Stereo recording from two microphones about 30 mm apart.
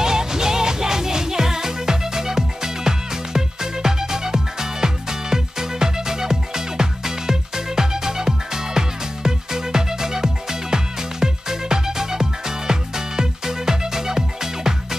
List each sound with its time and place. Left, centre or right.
0.0 s music: right